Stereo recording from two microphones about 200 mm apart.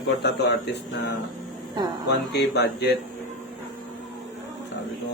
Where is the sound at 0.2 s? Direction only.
60° left (ahead or behind).